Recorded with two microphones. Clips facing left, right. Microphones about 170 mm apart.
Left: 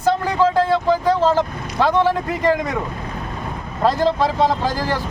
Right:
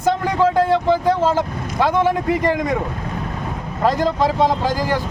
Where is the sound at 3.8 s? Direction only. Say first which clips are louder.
Even; 15° right (ahead or behind).